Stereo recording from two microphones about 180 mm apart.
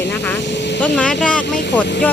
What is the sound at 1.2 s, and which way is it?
Speech, 5° left (ahead or behind).